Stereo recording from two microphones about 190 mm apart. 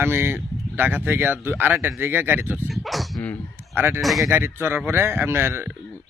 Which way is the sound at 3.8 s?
10° right (ahead or behind).